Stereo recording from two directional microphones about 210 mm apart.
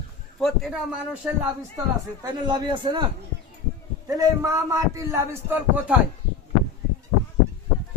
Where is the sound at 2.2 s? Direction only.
20° right (ahead or behind).